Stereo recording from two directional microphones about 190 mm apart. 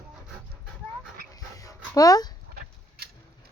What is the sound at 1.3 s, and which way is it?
Dog, 20° left (ahead or behind).